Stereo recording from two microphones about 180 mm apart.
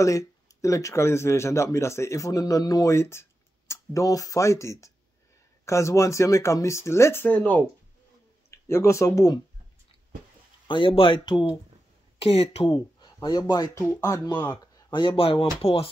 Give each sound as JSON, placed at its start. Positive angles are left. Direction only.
{"t": 0.0, "sound": "speech", "side_deg": 20}
{"t": 10.7, "sound": "speech", "side_deg": 30}
{"t": 12.7, "sound": "speech", "side_deg": 25}
{"t": 14.5, "sound": "speech", "side_deg": 25}